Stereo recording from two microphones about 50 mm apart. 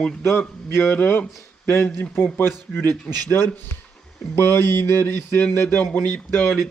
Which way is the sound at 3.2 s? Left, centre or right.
Left.